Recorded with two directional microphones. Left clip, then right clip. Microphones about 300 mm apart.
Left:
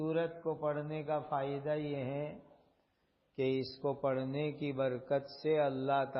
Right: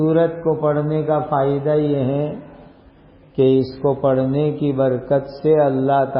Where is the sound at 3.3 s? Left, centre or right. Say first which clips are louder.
Right 19 dB; left.